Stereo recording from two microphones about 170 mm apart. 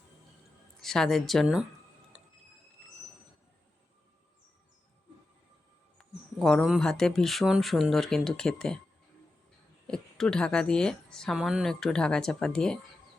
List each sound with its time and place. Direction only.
0.8 s a woman's voice: centre (ahead or behind)
2.1 s a sound: 5° right (ahead or behind)
6.0 s a woman's voice: centre (ahead or behind)
9.8 s a woman's voice: 5° left (ahead or behind)